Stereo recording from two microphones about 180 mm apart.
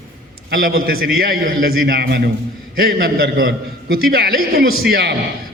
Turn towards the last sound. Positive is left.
turn(degrees=-65)  # may be behind; listen again after turning